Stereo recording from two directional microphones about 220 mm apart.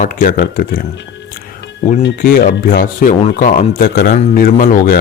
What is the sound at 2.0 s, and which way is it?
Speech, 45° left (ahead or behind).